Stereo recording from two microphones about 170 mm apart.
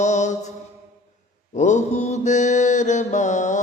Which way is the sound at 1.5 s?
45° left (ahead or behind).